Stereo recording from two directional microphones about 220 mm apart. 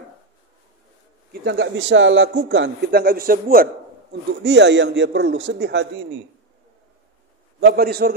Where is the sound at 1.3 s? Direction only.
50° right (ahead or behind).